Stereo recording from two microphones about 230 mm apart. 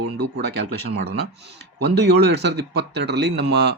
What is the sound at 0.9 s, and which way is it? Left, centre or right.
Speech, right.